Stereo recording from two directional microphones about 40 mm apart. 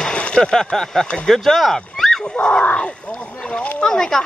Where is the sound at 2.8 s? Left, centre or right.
Left.